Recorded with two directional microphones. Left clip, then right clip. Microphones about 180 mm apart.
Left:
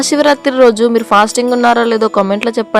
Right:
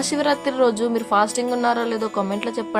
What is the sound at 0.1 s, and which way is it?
Speech, 50° left (ahead or behind).